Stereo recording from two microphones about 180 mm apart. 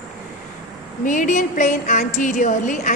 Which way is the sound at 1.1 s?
45° left (ahead or behind).